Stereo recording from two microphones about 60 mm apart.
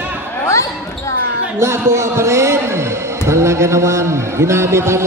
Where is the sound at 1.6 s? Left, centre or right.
Right.